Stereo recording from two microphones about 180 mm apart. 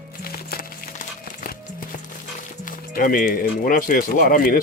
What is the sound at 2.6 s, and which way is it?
Speech, 50° left (ahead or behind).